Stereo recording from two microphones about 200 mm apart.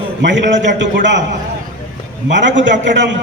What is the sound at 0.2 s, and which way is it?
Speech, 65° right (ahead or behind).